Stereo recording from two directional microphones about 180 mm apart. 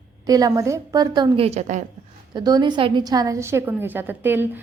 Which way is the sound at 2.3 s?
25° right (ahead or behind).